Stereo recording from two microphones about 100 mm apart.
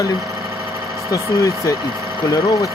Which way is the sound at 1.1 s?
30° left (ahead or behind).